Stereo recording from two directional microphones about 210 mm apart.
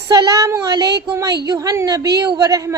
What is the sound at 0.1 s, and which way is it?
A woman's voice, 15° right (ahead or behind).